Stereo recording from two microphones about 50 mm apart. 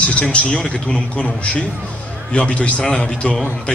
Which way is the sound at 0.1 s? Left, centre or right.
Left.